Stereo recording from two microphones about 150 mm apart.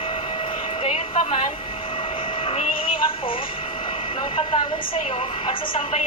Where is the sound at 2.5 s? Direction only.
35° left (ahead or behind).